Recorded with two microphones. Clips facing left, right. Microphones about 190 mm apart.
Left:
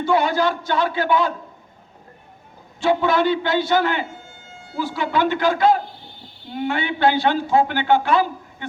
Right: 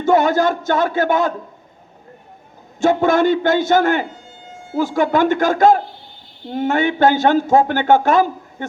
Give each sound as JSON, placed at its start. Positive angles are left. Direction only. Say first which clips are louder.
{"t": 0.0, "sound": "a man's voice", "louder": "right 4 dB", "side_deg": -45}
{"t": 2.8, "sound": "a man's voice", "louder": "right 4 dB", "side_deg": -45}